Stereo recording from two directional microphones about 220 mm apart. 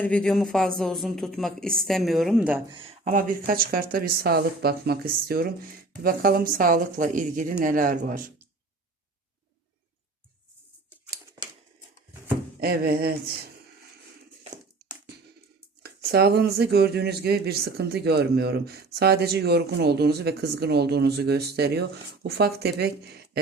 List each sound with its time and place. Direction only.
0.0 s a woman's voice: 5° left (ahead or behind)
2.6 s speech: 20° right (ahead or behind)
3.0 s speech: 40° right (ahead or behind)
12.5 s speech: 45° right (ahead or behind)
15.8 s speech: 45° right (ahead or behind)